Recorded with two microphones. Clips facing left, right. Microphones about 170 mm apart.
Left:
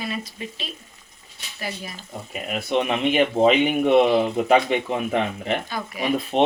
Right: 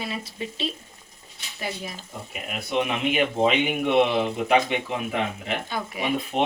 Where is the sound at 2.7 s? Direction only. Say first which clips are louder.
Left 3 dB; 35° left (ahead or behind).